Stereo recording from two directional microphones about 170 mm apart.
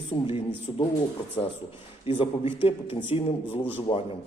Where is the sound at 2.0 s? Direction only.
30° left (ahead or behind).